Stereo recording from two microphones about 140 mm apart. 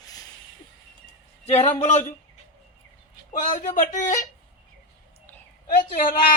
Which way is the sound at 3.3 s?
65° left (ahead or behind).